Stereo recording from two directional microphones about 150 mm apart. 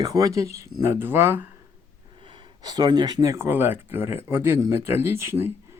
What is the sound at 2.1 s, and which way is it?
Speech, 35° right (ahead or behind).